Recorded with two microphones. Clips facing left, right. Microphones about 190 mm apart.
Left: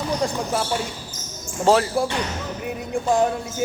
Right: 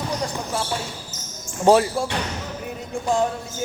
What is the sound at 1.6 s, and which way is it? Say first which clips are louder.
Speech: right 2 dB; 15° right (ahead or behind).